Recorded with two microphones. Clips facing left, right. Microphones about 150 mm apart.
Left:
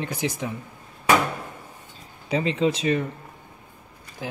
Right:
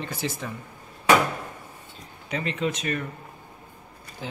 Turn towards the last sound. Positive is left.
turn(degrees=10)  # may be behind; listen again after turning